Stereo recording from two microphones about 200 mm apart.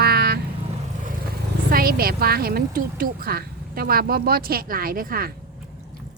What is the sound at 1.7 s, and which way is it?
A woman's voice, 50° right (ahead or behind).